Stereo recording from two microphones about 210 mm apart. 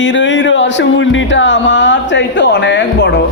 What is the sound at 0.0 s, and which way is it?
Speech, 60° left (ahead or behind).